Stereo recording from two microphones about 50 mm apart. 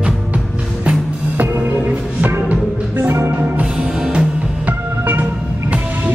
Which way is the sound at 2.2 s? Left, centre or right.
Right.